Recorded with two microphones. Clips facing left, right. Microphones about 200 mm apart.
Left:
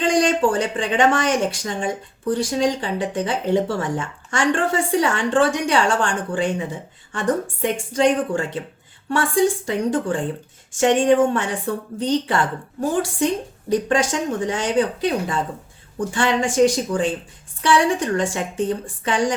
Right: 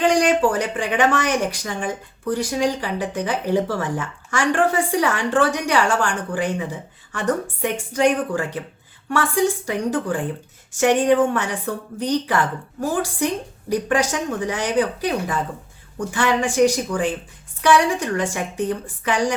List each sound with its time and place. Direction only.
0.1 s speech: 30° left (ahead or behind)
9.6 s speech: 25° left (ahead or behind)